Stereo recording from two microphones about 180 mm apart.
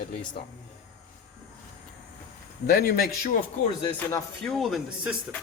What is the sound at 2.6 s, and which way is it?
Speech, 55° left (ahead or behind).